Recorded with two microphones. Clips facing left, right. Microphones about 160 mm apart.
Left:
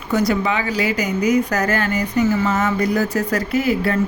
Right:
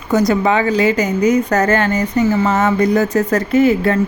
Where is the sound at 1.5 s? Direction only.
45° right (ahead or behind).